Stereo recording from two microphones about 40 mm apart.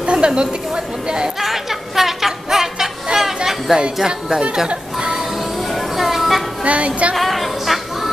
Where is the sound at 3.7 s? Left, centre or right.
Centre.